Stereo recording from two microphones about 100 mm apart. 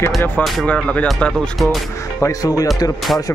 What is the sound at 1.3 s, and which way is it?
Speech, centre (ahead or behind).